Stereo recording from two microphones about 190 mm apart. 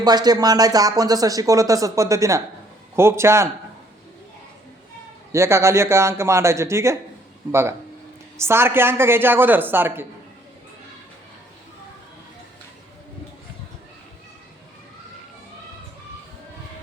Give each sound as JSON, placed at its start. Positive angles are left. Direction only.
{"t": 0.0, "sound": "a woman's voice", "side_deg": -20}
{"t": 5.3, "sound": "a woman's voice", "side_deg": -15}